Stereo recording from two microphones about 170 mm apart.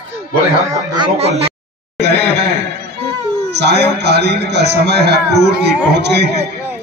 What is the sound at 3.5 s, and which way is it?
A man's voice, 75° right (ahead or behind).